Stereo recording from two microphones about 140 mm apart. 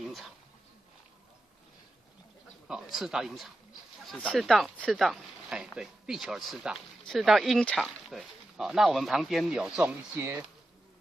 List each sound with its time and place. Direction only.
0.0 s a sound: centre (ahead or behind)
2.7 s speech: centre (ahead or behind)
10.1 s speech: 15° right (ahead or behind)